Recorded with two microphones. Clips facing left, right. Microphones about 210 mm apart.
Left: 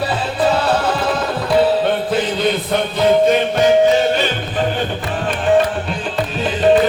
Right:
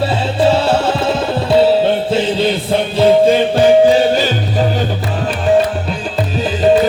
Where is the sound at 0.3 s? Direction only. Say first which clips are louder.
Right 4 dB; 25° right (ahead or behind).